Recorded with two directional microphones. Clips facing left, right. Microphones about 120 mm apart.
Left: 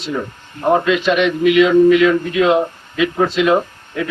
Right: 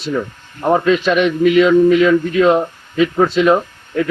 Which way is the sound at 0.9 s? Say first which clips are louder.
Right 1 dB; 40° right (ahead or behind).